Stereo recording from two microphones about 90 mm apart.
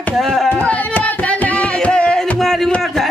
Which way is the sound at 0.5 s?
20° left (ahead or behind).